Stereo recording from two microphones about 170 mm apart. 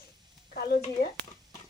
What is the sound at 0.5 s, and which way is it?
Speech, 60° left (ahead or behind).